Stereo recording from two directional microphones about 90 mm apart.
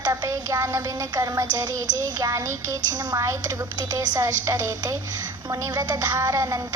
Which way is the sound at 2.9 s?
50° right (ahead or behind).